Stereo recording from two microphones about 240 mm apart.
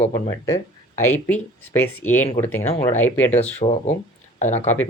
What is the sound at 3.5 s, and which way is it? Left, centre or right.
Speech, left.